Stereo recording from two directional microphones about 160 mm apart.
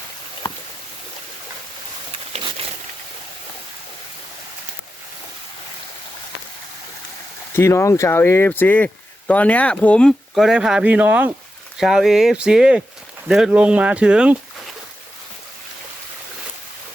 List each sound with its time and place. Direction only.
0.4 s rowboat: 30° left (ahead or behind)
7.5 s speech: 15° left (ahead or behind); by 14.3 s 5° right (ahead or behind)